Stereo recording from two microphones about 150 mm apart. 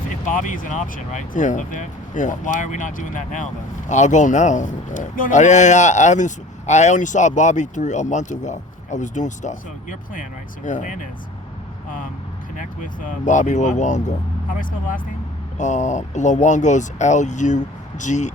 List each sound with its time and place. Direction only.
0.3 s speech: 65° left (ahead or behind)
12.5 s speech: 60° left (ahead or behind)
15.5 s speech: 55° left (ahead or behind)